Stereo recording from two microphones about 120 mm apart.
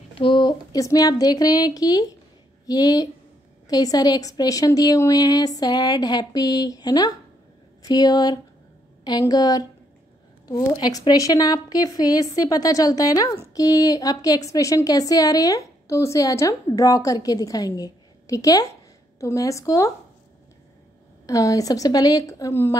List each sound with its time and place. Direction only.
0.1 s a woman's voice: 45° left (ahead or behind); by 19.9 s 25° left (ahead or behind)
21.3 s a woman's voice: 30° left (ahead or behind)